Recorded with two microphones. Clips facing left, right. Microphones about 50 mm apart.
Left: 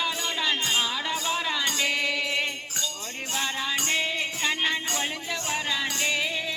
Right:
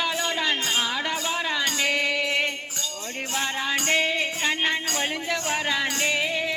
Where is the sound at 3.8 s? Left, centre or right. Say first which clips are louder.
Right 6 dB; right.